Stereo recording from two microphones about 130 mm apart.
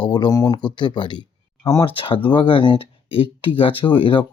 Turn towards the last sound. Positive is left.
turn(degrees=40)  # may be behind; listen again after turning